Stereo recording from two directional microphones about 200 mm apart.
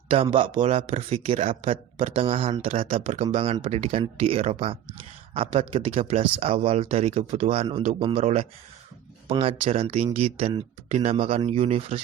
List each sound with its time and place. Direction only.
0.1 s speech: 25° right (ahead or behind)